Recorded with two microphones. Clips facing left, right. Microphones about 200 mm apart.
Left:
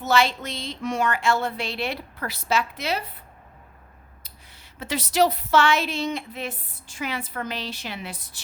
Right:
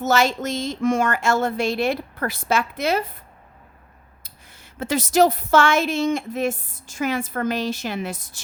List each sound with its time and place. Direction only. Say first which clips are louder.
0.0 s speech: right 2 dB; 45° right (ahead or behind)
4.2 s speech: right 2 dB; 50° right (ahead or behind)